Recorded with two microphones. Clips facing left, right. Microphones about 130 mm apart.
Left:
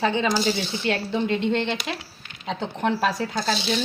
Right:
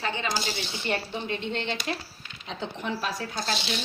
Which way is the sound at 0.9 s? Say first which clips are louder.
Left 6 dB; 85° left.